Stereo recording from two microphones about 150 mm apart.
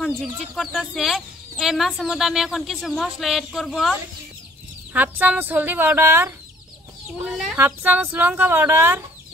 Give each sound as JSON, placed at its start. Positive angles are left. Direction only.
{"t": 0.0, "sound": "speech", "side_deg": 5}
{"t": 4.9, "sound": "speech", "side_deg": -10}
{"t": 7.2, "sound": "speech", "side_deg": 0}
{"t": 7.5, "sound": "speech", "side_deg": -10}